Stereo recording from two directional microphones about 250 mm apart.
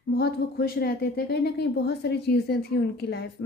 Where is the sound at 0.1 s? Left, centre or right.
Left.